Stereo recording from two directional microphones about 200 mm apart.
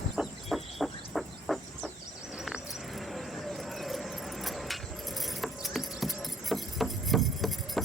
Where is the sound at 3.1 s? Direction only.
Centre (ahead or behind).